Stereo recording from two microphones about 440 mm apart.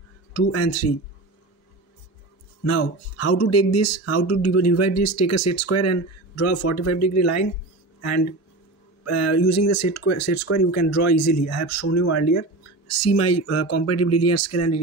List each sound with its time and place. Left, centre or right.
0.3 s speech: left
2.6 s speech: left